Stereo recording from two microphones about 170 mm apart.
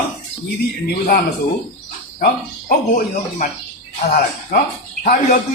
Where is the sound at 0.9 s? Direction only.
65° left (ahead or behind).